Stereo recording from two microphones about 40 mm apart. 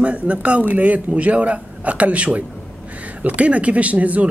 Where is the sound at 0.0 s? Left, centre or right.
Right.